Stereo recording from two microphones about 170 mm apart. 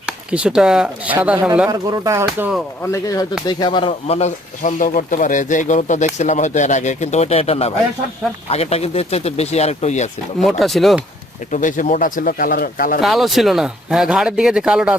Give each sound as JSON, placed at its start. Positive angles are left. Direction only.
{"t": 0.0, "sound": "speech", "side_deg": -5}
{"t": 2.8, "sound": "speech", "side_deg": 20}
{"t": 10.4, "sound": "speech", "side_deg": 0}
{"t": 11.5, "sound": "speech", "side_deg": 50}
{"t": 13.0, "sound": "speech", "side_deg": 0}